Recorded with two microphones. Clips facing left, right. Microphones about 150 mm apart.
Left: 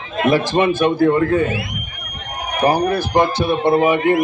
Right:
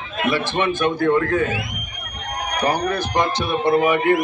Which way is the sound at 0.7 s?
30° left (ahead or behind).